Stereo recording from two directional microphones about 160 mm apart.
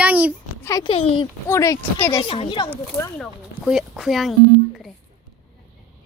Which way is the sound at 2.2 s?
35° left (ahead or behind).